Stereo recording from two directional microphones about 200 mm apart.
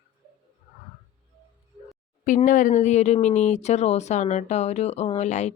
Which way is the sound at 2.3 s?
40° left (ahead or behind).